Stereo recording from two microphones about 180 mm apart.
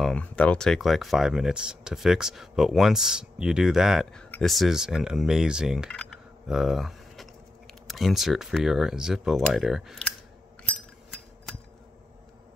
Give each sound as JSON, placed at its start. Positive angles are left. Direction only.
{"t": 0.0, "sound": "speech", "side_deg": 5}